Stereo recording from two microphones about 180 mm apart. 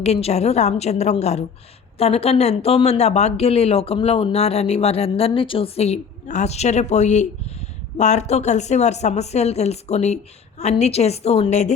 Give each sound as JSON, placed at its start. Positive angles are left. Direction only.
{"t": 0.0, "sound": "speech", "side_deg": 35}